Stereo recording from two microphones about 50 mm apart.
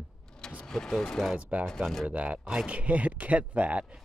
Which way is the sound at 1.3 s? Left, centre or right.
Right.